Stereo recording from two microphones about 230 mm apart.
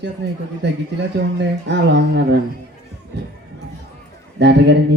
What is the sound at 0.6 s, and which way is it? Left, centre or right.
Guitar, right.